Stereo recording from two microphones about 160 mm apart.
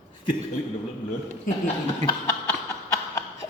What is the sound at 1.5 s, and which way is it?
Speech, 55° left (ahead or behind).